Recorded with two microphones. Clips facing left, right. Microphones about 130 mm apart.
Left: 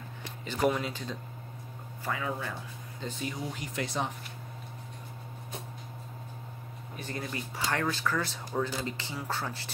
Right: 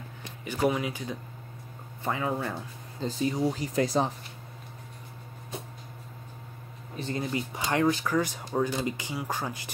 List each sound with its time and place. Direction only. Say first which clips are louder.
0.5 s speech: right 2 dB; 10° right (ahead or behind)
2.0 s speech: right 4 dB; 30° right (ahead or behind)
7.0 s speech: right 6 dB; 25° right (ahead or behind)